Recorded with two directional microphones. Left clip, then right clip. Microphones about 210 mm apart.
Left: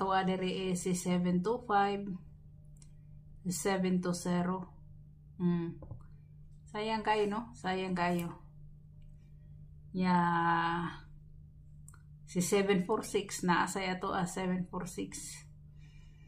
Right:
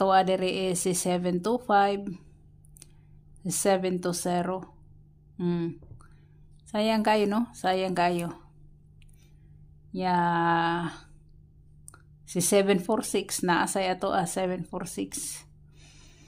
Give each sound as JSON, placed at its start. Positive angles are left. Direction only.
{"t": 0.0, "sound": "speech", "side_deg": -50}
{"t": 3.4, "sound": "speech", "side_deg": -50}
{"t": 9.9, "sound": "speech", "side_deg": -45}
{"t": 12.3, "sound": "speech", "side_deg": -45}